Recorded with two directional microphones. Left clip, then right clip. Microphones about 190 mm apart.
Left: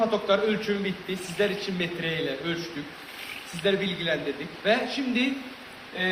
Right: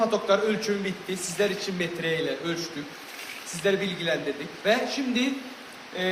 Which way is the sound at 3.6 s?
10° right (ahead or behind).